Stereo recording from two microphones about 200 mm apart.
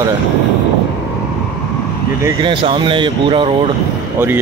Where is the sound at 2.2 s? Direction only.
25° right (ahead or behind).